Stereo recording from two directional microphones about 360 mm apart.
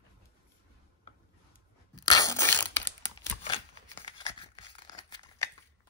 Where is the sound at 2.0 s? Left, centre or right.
Centre.